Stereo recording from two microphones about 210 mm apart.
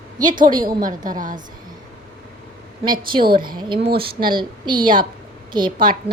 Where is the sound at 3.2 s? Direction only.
45° right (ahead or behind).